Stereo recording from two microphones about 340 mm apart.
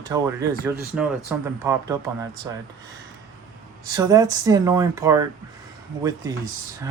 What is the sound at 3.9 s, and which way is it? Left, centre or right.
Speech, centre.